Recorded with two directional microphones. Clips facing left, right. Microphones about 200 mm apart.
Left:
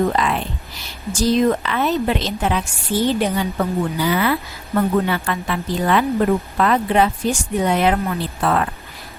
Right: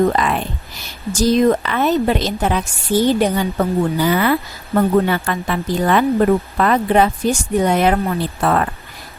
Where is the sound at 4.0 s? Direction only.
50° right (ahead or behind).